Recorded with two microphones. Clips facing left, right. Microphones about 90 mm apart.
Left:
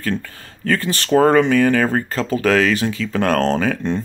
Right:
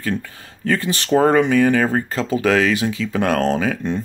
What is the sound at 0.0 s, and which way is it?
Speech, 15° right (ahead or behind).